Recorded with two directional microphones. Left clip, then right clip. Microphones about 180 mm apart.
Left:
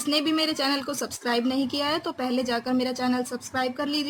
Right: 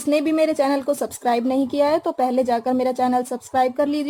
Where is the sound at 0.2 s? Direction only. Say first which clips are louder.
Right 5 dB; 35° right (ahead or behind).